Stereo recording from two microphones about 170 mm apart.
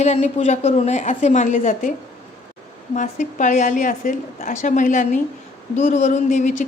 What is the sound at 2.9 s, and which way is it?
A woman's voice, 45° left (ahead or behind).